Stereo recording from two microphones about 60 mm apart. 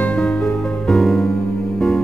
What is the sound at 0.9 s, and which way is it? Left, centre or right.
Music, centre.